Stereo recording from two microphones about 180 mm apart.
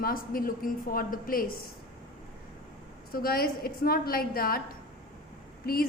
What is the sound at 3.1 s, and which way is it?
A woman's voice, 55° left (ahead or behind).